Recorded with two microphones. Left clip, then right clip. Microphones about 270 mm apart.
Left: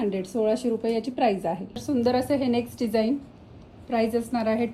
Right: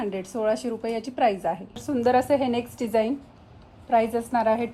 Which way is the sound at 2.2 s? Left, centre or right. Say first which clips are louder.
Right 2 dB; centre.